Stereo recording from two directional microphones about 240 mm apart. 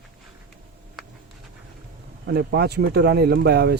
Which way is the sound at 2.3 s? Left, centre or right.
Right.